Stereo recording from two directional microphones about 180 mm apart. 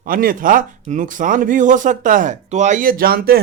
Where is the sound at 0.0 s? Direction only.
50° right (ahead or behind).